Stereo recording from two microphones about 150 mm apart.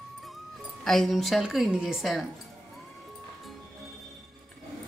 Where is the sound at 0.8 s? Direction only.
5° left (ahead or behind).